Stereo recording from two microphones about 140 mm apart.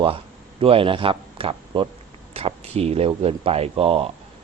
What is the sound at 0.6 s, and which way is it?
A man's voice, 40° right (ahead or behind).